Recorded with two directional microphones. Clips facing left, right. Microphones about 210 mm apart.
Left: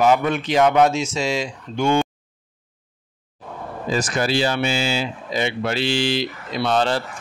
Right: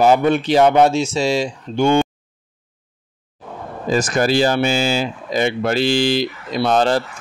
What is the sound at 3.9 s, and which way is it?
Speech, 45° right (ahead or behind).